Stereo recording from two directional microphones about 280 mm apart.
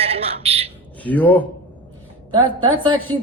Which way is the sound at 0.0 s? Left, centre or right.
Right.